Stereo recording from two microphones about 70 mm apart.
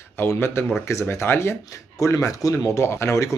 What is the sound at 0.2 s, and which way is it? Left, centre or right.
Speech, left.